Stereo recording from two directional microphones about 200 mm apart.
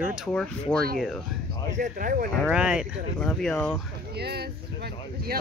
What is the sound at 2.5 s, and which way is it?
Speech, 5° right (ahead or behind).